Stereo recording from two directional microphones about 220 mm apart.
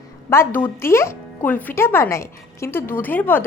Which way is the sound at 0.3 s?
10° left (ahead or behind).